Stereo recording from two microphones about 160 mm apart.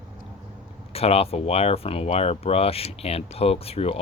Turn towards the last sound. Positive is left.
turn(degrees=40)  # may be behind; listen again after turning